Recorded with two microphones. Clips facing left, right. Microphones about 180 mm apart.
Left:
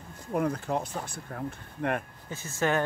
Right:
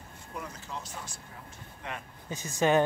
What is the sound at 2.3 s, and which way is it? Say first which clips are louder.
Speech: right 2 dB; 15° right (ahead or behind).